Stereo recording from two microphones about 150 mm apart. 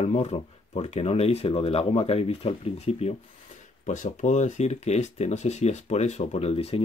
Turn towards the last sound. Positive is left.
turn(degrees=40)  # may be behind; listen again after turning